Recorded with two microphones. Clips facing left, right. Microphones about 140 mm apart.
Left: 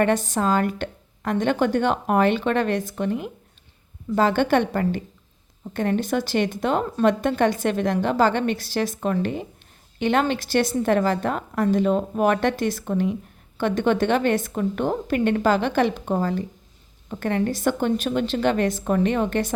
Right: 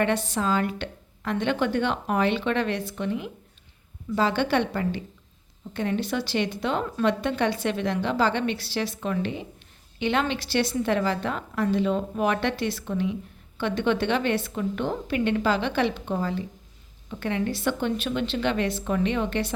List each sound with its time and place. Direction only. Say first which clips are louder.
0.0 s a woman's voice: left 4 dB; 45° left (ahead or behind)